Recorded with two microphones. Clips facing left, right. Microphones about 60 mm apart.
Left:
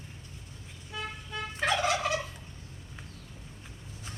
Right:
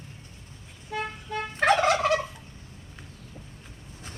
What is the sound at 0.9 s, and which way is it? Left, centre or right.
Gobble, right.